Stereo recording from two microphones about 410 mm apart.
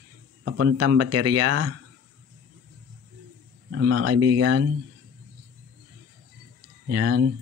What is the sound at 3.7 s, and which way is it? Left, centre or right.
Speech, right.